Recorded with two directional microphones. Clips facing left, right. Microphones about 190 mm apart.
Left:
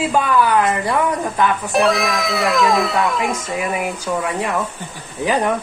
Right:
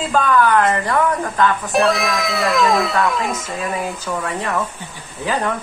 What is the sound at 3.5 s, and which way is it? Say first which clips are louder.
Speech: left 2 dB; 15° left (ahead or behind).